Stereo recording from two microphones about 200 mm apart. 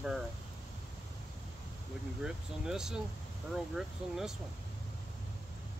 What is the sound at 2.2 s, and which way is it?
Speech, 5° right (ahead or behind).